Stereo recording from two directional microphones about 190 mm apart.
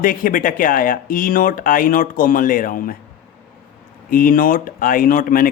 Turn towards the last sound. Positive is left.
turn(degrees=50)  # may be behind; listen again after turning